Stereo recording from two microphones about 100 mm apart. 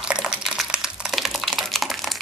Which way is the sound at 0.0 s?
5° right (ahead or behind).